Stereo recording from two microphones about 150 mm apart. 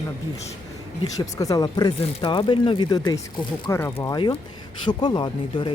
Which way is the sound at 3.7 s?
20° left (ahead or behind).